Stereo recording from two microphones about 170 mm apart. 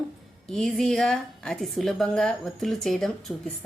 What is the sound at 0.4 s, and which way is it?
A woman's voice, 5° left (ahead or behind).